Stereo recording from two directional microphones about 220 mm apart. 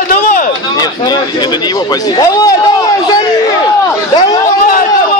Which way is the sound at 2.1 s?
15° left (ahead or behind).